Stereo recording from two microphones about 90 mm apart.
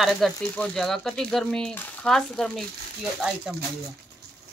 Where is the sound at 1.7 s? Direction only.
20° left (ahead or behind).